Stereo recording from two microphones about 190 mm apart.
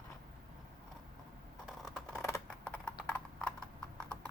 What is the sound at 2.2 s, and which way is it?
Computer keyboard, 15° left (ahead or behind).